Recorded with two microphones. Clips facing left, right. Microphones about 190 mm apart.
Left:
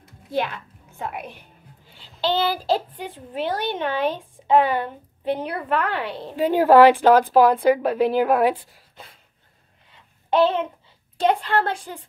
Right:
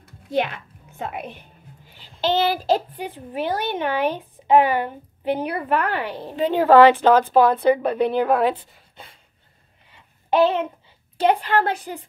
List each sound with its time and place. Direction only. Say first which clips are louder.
0.3 s a child's voice: right 2 dB; 20° right (ahead or behind)
2.5 s speech: right 2 dB; 15° right (ahead or behind)
6.3 s a woman's voice: even; 10° left (ahead or behind)
10.3 s speech: right 1 dB; 15° right (ahead or behind)